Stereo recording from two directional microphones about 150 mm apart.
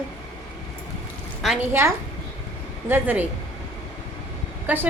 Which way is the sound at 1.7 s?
15° right (ahead or behind).